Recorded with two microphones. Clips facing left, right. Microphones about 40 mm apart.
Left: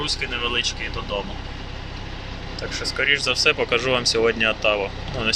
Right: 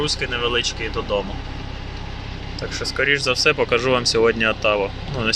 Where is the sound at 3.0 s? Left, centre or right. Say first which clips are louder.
Right 2 dB; centre.